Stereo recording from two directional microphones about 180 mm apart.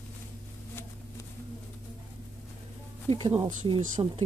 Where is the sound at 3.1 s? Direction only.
40° right (ahead or behind).